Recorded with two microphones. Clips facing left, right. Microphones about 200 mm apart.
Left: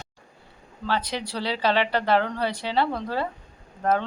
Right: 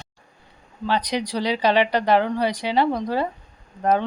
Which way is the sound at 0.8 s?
15° right (ahead or behind).